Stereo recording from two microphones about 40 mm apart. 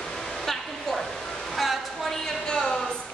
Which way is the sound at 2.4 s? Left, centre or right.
Centre.